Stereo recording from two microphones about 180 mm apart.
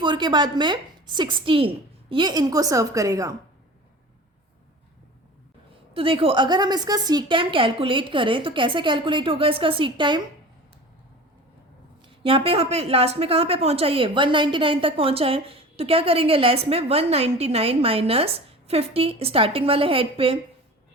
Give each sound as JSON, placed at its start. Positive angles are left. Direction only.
{"t": 0.0, "sound": "a woman's voice", "side_deg": -25}
{"t": 5.9, "sound": "a woman's voice", "side_deg": -30}
{"t": 12.0, "sound": "a woman's voice", "side_deg": -30}